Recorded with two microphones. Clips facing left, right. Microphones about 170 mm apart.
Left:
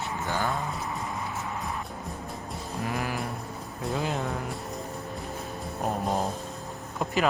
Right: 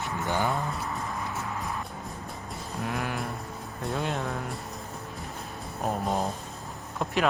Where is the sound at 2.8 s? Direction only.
Centre (ahead or behind).